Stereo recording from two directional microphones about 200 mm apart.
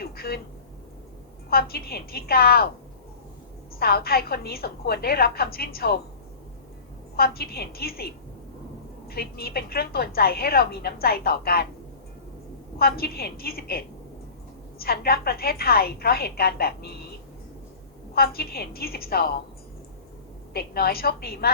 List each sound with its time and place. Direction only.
0.0 s a sound: 50° left (ahead or behind)
1.5 s a woman's voice: 50° left (ahead or behind)
3.8 s a woman's voice: 50° left (ahead or behind)
7.2 s a woman's voice: 50° left (ahead or behind)
12.8 s a woman's voice: 50° left (ahead or behind)
18.1 s a woman's voice: 50° left (ahead or behind)
20.5 s a woman's voice: 50° left (ahead or behind)